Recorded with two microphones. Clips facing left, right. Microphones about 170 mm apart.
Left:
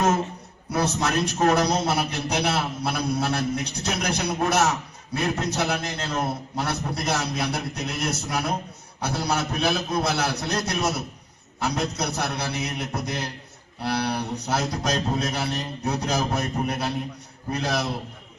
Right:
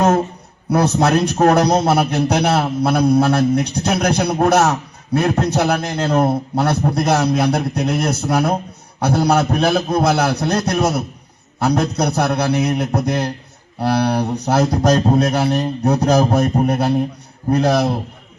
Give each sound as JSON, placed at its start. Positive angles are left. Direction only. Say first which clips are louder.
{"t": 0.7, "sound": "speech", "louder": "right 9 dB", "side_deg": -60}
{"t": 1.4, "sound": "speech", "louder": "right 6 dB", "side_deg": -50}
{"t": 3.8, "sound": "a man's voice", "louder": "right 8 dB", "side_deg": -50}
{"t": 5.8, "sound": "a man's voice", "louder": "right 11 dB", "side_deg": -55}